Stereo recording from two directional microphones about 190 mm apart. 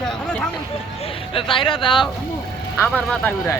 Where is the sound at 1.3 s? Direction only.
30° left (ahead or behind).